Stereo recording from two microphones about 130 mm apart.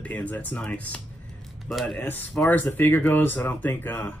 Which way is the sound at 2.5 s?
15° left (ahead or behind).